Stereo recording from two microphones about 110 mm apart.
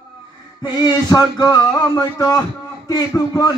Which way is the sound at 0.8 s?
35° left (ahead or behind).